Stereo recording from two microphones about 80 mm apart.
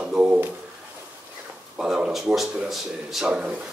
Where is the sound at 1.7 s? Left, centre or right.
Centre.